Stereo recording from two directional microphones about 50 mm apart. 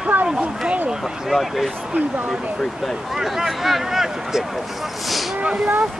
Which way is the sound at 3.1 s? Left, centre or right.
Centre.